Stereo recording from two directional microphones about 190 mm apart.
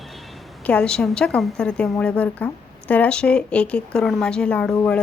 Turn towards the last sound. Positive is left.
turn(degrees=10)  # may be behind; listen again after turning